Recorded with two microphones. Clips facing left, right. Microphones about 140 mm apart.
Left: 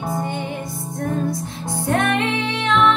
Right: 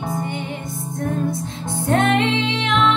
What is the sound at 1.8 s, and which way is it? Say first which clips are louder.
Music: right 2 dB; 20° right (ahead or behind).